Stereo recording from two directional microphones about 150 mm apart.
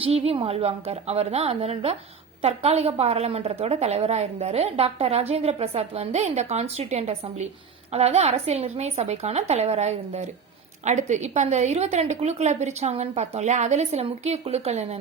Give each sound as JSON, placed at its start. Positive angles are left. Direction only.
{"t": 0.0, "sound": "a woman's voice", "side_deg": -40}